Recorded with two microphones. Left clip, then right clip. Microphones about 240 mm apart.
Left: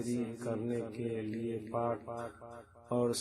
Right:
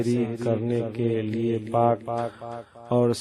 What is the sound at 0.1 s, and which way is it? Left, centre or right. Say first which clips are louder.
A man's voice: right 12 dB; right.